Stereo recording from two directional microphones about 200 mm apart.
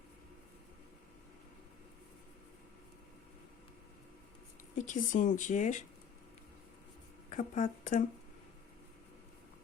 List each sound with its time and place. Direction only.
4.7 s speech: 40° left (ahead or behind)
7.3 s speech: 35° left (ahead or behind)